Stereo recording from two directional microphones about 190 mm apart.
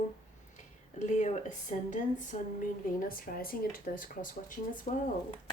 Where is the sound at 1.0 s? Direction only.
40° left (ahead or behind).